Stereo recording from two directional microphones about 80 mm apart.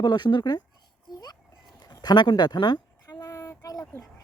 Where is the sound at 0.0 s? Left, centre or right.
Left.